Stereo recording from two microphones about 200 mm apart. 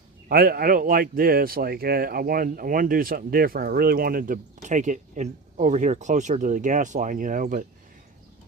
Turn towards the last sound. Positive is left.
turn(degrees=-40)  # may be behind; listen again after turning